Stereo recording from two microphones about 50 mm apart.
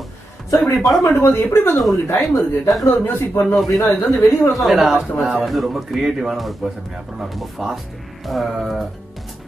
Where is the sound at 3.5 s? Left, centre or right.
Centre.